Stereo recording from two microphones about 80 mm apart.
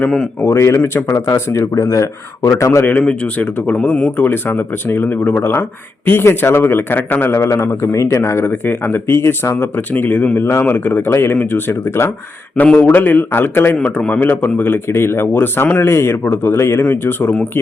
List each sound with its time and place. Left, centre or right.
0.4 s speech: left
3.0 s speech: centre
4.2 s a man's voice: left
12.6 s a man's voice: centre
13.7 s a man's voice: centre; by 17.3 s left